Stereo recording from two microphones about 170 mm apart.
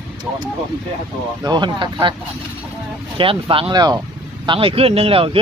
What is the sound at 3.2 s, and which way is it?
Speech, 30° right (ahead or behind).